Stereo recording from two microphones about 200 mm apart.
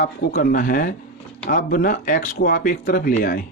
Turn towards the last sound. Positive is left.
turn(degrees=45)  # may be behind; listen again after turning